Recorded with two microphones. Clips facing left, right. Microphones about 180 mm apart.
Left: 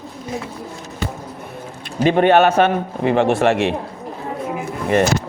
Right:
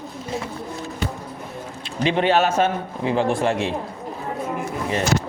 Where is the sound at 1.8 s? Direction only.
50° left (ahead or behind); by 3.7 s 70° left (ahead or behind).